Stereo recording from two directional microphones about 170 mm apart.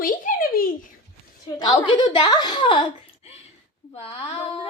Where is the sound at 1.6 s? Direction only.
25° left (ahead or behind).